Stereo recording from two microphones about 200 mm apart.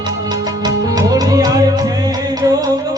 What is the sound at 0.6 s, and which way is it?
Music, 20° right (ahead or behind).